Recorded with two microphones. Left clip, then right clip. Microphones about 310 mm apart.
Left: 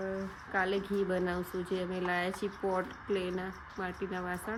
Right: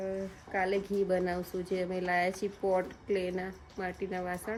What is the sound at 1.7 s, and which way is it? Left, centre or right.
Speech, centre.